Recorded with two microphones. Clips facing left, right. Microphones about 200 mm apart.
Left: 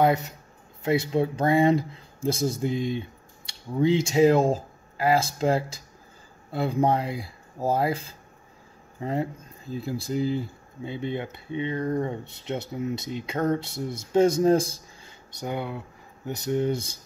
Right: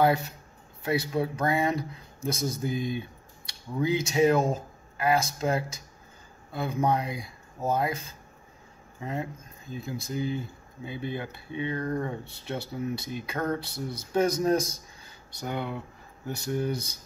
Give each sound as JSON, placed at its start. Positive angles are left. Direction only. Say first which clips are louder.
{"t": 0.8, "sound": "speech", "louder": "left 4 dB", "side_deg": 25}
{"t": 9.0, "sound": "speech", "louder": "left 5 dB", "side_deg": 35}
{"t": 15.4, "sound": "speech", "louder": "left 2 dB", "side_deg": 10}